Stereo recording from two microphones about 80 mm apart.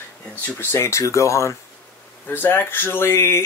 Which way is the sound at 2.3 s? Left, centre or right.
Left.